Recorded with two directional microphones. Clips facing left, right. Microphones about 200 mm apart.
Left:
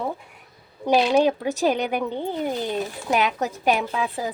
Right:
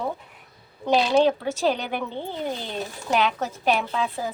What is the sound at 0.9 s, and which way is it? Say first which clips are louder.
A woman's voice: left 1 dB; 15° left (ahead or behind).